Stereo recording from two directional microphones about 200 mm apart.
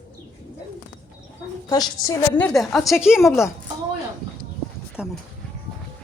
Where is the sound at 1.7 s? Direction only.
20° left (ahead or behind).